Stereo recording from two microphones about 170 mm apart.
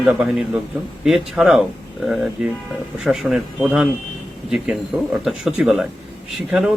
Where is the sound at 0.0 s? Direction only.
5° right (ahead or behind).